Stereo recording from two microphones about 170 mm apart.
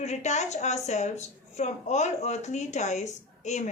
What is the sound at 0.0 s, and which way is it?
A woman's voice, 40° left (ahead or behind).